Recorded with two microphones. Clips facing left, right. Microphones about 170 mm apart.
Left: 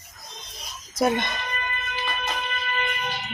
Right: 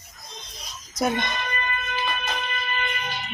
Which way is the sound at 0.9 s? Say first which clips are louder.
Left 2 dB; 10° left (ahead or behind).